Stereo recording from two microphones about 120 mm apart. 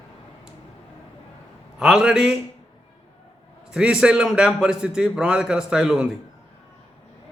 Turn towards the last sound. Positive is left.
turn(degrees=-5)  # may be behind; listen again after turning